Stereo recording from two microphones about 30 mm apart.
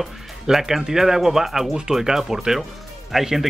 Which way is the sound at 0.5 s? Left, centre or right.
Centre.